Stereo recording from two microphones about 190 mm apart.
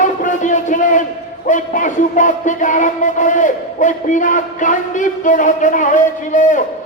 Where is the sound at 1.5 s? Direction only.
40° left (ahead or behind).